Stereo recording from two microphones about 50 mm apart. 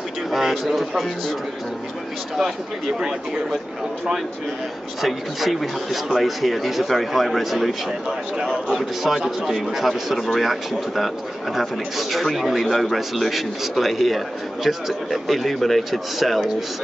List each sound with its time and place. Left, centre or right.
0.3 s a man's voice: centre
5.0 s a man's voice: centre
8.1 s a man's voice: centre
8.7 s a man's voice: centre